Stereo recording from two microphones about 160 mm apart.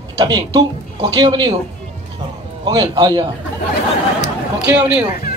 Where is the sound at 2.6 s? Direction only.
25° right (ahead or behind).